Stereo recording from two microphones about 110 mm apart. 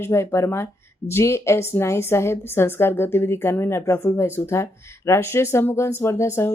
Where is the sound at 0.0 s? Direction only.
25° left (ahead or behind).